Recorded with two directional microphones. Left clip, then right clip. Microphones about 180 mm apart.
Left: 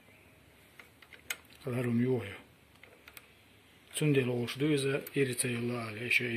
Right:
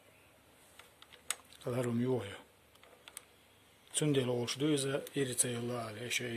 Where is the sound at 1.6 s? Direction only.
20° right (ahead or behind).